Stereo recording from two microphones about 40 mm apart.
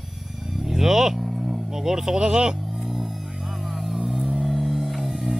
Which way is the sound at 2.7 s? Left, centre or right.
Centre.